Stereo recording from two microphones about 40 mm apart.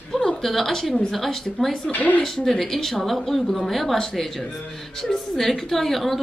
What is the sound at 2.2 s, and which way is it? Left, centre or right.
Speech, centre.